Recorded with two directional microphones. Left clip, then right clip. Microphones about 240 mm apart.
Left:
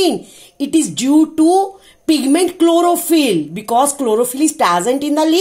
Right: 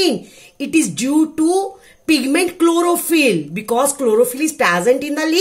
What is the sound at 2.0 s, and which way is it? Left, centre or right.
Speech, centre.